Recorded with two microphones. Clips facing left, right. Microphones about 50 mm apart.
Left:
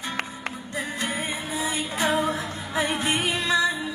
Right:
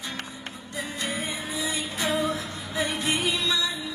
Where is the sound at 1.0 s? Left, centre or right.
Left.